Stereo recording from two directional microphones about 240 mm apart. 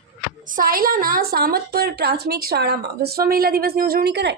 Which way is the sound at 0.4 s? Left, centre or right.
Right.